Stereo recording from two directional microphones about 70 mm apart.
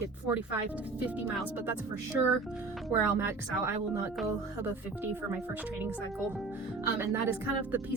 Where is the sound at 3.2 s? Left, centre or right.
Right.